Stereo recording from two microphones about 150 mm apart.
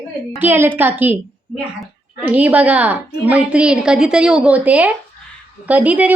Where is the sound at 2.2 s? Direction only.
10° right (ahead or behind).